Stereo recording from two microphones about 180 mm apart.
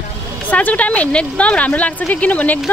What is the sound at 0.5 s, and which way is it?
Speech, 10° left (ahead or behind).